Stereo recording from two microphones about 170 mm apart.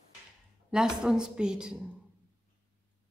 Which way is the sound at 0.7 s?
5° right (ahead or behind).